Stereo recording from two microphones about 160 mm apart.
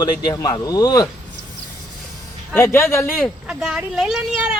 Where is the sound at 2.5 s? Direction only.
15° left (ahead or behind).